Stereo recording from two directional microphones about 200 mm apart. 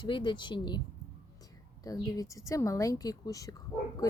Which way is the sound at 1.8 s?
20° left (ahead or behind).